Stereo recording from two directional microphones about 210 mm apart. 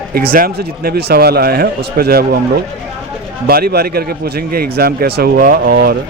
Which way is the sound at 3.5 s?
45° right (ahead or behind).